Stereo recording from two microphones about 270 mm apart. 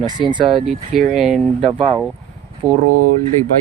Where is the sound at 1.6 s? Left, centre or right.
Right.